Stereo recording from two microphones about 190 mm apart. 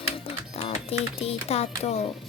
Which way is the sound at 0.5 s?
35° left (ahead or behind).